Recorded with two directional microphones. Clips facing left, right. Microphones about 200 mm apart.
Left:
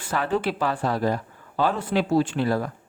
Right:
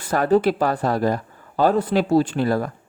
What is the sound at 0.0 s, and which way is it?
A man's voice, 40° right (ahead or behind).